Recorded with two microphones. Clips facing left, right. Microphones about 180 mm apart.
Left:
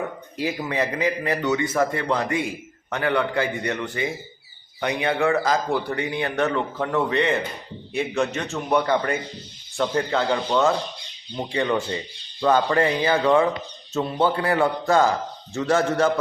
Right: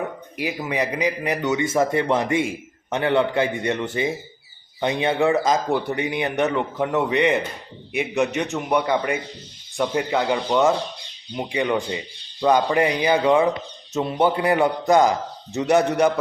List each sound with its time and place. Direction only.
0.3 s a man's voice: 15° right (ahead or behind)